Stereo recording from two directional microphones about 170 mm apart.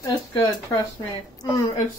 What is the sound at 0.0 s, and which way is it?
Speech, 20° left (ahead or behind).